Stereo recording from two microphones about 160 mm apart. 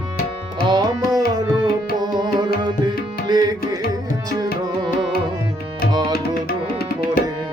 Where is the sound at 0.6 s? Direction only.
25° right (ahead or behind).